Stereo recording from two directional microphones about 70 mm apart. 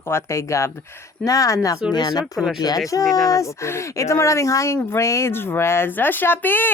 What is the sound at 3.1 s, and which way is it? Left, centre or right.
Speech, left.